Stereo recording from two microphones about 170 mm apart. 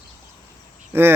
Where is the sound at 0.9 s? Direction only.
15° right (ahead or behind).